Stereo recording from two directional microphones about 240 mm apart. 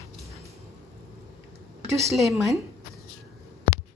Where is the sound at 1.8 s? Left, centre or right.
Centre.